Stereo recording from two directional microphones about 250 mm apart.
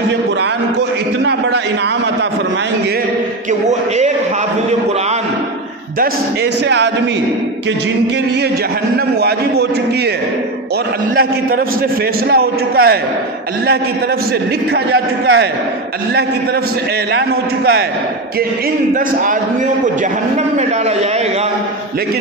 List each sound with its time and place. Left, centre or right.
12.3 s a man's voice: right
14.9 s a man's voice: right